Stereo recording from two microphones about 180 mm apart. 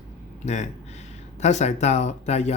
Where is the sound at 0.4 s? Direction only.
40° left (ahead or behind).